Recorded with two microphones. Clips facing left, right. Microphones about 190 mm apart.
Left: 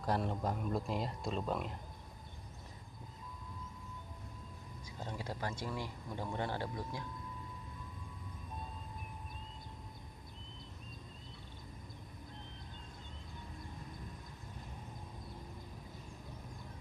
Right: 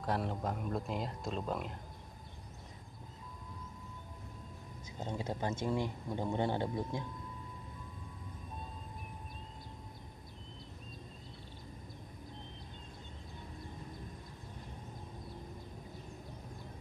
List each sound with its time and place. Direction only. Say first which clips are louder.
0.0 s speech: even; centre (ahead or behind)
4.9 s speech: right 4 dB; 20° right (ahead or behind)